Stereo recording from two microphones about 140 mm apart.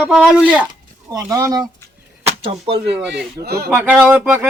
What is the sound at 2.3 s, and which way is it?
Speech, 45° right (ahead or behind).